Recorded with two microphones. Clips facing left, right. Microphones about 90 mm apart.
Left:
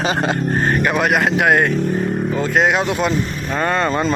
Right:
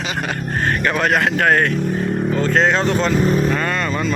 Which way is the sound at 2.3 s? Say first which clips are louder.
Even; 15° left (ahead or behind).